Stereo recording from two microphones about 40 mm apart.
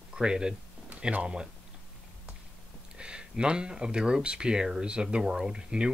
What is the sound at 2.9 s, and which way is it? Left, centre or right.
Speech, right.